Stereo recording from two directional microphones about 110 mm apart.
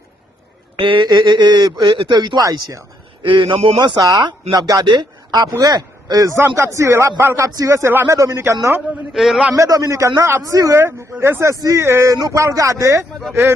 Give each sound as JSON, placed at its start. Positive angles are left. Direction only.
{"t": 0.8, "sound": "speech", "side_deg": -50}
{"t": 3.2, "sound": "a man's voice", "side_deg": -50}
{"t": 9.1, "sound": "a man's voice", "side_deg": -5}
{"t": 9.6, "sound": "speech", "side_deg": -30}